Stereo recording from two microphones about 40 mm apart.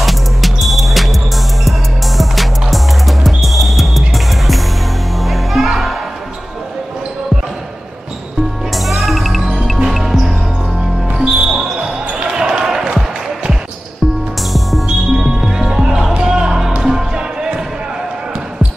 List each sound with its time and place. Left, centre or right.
0.0 s music: centre
8.7 s music: centre
11.3 s basketball bounce: centre
15.0 s music: centre
15.6 s music: centre